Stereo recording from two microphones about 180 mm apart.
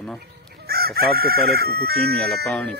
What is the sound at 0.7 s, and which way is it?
Chicken, 60° right (ahead or behind).